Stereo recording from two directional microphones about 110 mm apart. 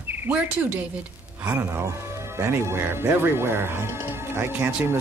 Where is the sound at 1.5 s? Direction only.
20° right (ahead or behind).